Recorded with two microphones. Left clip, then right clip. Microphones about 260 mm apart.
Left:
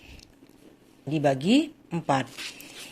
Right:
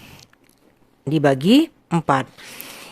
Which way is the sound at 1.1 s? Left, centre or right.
Right.